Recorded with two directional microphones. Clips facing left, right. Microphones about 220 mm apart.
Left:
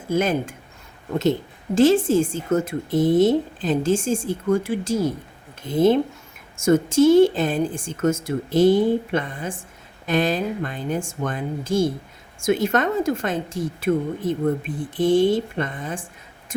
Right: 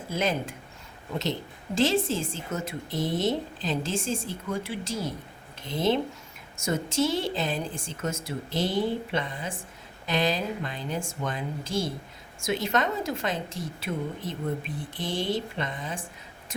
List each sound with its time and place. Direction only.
0.1 s speech: 50° left (ahead or behind)